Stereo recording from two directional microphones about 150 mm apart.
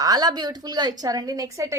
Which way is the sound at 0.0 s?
25° right (ahead or behind).